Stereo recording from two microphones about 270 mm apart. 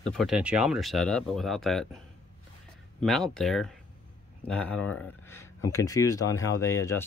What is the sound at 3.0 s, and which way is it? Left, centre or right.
Speech, centre.